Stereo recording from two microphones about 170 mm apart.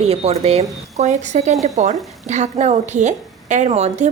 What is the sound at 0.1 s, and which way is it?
A woman's voice, 35° right (ahead or behind).